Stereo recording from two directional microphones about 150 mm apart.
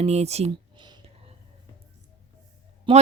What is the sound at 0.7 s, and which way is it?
Whispering, 30° right (ahead or behind).